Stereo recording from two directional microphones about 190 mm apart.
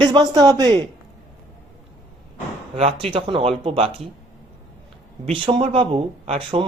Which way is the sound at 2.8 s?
30° right (ahead or behind).